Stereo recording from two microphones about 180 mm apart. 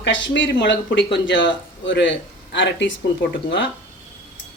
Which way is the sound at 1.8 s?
90° left.